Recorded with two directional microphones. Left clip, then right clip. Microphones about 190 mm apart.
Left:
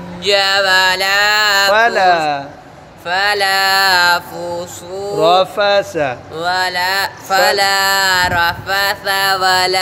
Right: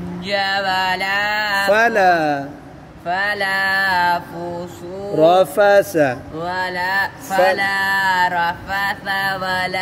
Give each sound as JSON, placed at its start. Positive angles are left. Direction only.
{"t": 0.2, "sound": "a sound", "side_deg": 55}
{"t": 1.7, "sound": "speech", "side_deg": -30}
{"t": 3.1, "sound": "mantra", "side_deg": 55}
{"t": 5.2, "sound": "speech", "side_deg": -25}
{"t": 6.3, "sound": "speech", "side_deg": 55}